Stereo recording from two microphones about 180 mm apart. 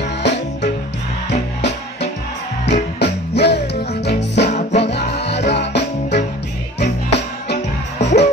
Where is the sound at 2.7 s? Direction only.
65° left (ahead or behind).